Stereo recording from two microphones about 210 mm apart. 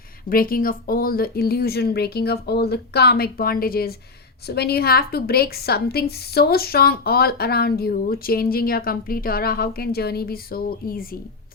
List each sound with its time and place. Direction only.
0.3 s a woman's voice: 45° left (ahead or behind)